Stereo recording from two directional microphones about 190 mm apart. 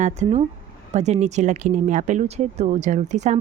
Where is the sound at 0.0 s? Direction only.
35° right (ahead or behind).